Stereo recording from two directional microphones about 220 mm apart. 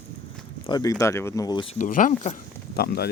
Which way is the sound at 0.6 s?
20° left (ahead or behind).